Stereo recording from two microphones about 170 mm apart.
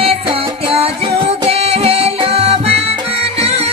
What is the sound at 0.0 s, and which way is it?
Music, 35° right (ahead or behind).